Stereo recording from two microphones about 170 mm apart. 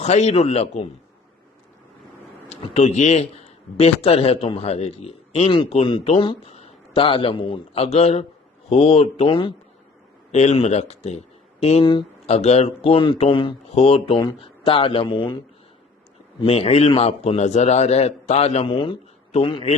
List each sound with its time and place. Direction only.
0.0 s a man's voice: 40° left (ahead or behind)
2.5 s a man's voice: 40° left (ahead or behind)
16.4 s a man's voice: 35° left (ahead or behind)